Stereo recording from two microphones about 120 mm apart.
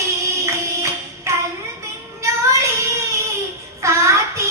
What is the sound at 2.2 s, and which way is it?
Child singing, 25° right (ahead or behind).